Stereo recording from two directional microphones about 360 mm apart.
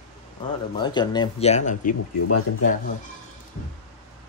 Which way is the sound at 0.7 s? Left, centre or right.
Centre.